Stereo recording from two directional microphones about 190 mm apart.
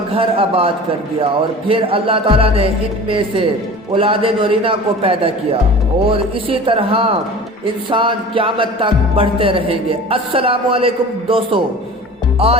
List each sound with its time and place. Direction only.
0.1 s music: 30° right (ahead or behind)